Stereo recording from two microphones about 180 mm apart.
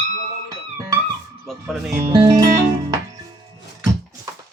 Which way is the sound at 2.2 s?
25° right (ahead or behind).